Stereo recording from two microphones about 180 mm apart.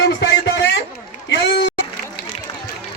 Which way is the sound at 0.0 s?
75° left (ahead or behind).